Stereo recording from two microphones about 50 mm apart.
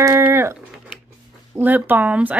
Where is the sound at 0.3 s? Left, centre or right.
Right.